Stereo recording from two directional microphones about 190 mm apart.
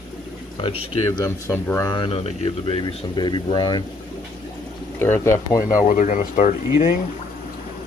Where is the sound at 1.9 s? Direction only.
25° left (ahead or behind).